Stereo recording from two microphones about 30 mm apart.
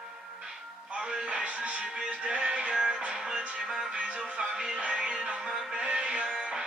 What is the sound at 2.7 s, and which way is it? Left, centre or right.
Music, right.